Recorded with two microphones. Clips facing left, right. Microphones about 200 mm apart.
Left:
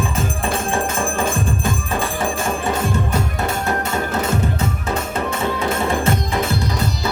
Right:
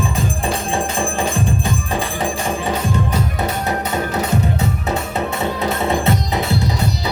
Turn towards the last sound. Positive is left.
turn(degrees=-20)  # may be behind; listen again after turning